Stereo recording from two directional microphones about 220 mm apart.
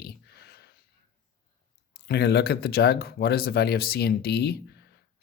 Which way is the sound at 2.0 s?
45° left (ahead or behind).